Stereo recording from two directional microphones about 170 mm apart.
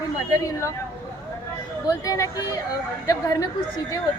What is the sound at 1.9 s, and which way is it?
Speech, 20° left (ahead or behind).